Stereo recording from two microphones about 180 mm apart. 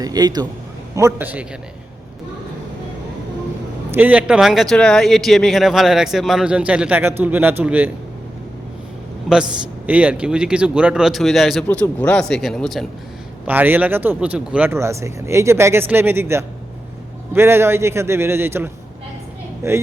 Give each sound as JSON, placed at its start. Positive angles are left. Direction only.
{"t": 0.0, "sound": "a man's voice", "side_deg": -20}
{"t": 3.9, "sound": "speech", "side_deg": -10}
{"t": 9.3, "sound": "speech", "side_deg": -5}
{"t": 13.5, "sound": "speech", "side_deg": -10}